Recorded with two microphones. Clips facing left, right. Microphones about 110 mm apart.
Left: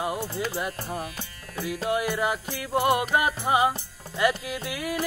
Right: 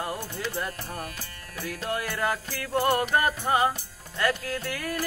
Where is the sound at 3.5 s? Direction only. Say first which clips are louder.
Left 1 dB; 10° left (ahead or behind).